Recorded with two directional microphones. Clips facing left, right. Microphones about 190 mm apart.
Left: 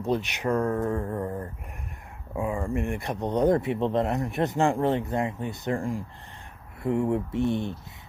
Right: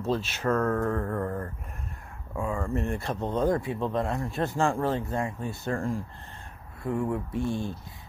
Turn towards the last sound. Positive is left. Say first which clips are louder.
# left 3 dB
turn(degrees=20)  # may be behind; listen again after turning